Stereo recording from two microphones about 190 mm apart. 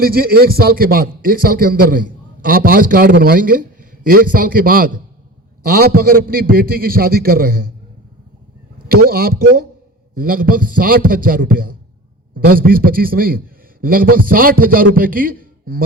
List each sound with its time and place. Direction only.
0.0 s a man's voice: 50° right (ahead or behind)
8.9 s a man's voice: 50° right (ahead or behind)